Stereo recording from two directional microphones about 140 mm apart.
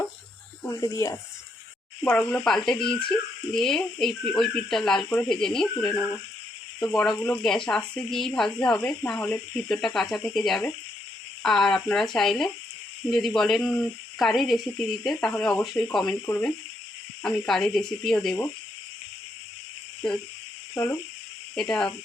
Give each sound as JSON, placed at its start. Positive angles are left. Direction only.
{"t": 0.9, "sound": "speech", "side_deg": 20}
{"t": 2.0, "sound": "speech", "side_deg": 10}
{"t": 16.2, "sound": "speech", "side_deg": 15}
{"t": 17.2, "sound": "speech", "side_deg": 5}
{"t": 20.7, "sound": "speech", "side_deg": 15}
{"t": 21.5, "sound": "speech", "side_deg": 5}